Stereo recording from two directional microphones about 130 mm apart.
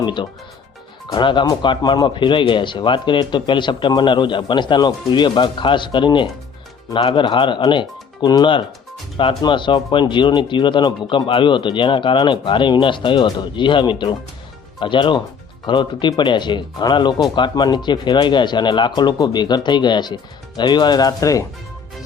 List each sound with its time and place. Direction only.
0.0 s speech: 35° left (ahead or behind)